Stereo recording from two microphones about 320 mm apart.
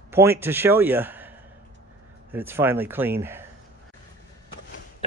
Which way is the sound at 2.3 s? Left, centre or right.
Centre.